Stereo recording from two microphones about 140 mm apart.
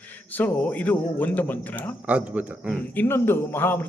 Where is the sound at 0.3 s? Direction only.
10° left (ahead or behind).